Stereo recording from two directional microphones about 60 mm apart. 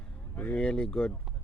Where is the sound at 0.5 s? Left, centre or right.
Centre.